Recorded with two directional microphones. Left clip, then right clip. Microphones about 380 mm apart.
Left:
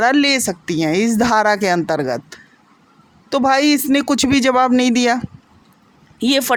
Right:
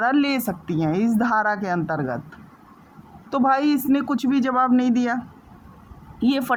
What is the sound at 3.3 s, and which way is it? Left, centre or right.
Speech, right.